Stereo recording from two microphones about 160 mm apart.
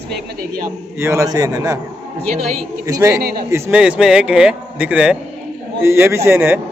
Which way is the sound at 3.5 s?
5° right (ahead or behind).